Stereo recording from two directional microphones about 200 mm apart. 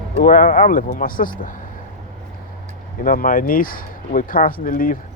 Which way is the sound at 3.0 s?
45° left (ahead or behind).